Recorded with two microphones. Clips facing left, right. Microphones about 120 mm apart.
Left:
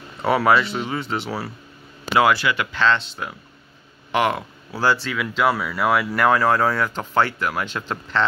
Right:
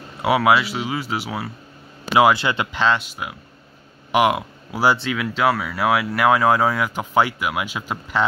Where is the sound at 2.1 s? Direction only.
15° right (ahead or behind).